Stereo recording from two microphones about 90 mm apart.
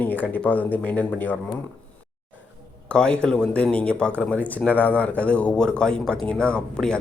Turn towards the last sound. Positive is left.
turn(degrees=10)  # may be behind; listen again after turning